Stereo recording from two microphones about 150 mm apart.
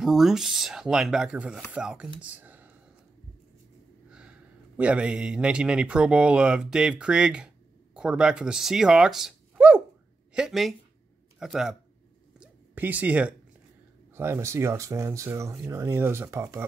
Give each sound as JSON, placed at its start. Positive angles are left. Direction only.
{"t": 0.0, "sound": "speech", "side_deg": 0}
{"t": 4.7, "sound": "a man's voice", "side_deg": -10}
{"t": 12.4, "sound": "a sound", "side_deg": -10}
{"t": 14.1, "sound": "a man's voice", "side_deg": -15}